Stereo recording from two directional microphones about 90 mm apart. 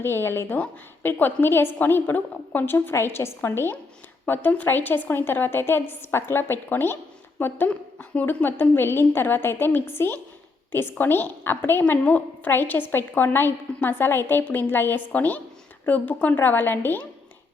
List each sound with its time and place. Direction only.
0.0 s a woman's voice: 25° left (ahead or behind)